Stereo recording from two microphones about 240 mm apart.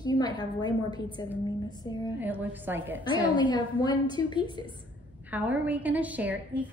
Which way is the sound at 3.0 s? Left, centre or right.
Centre.